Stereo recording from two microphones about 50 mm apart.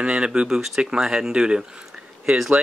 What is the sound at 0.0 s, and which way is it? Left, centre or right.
Speech, centre.